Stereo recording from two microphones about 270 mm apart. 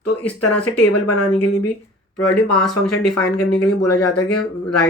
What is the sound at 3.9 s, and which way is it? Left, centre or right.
Speech, left.